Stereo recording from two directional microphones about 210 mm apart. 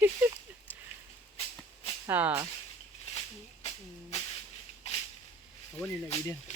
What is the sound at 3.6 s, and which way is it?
Hiss, 20° left (ahead or behind).